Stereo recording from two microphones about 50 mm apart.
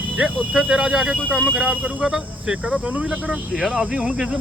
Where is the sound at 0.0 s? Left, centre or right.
Right.